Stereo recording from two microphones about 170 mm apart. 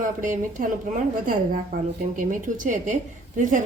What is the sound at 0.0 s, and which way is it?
A woman's voice, 50° right (ahead or behind).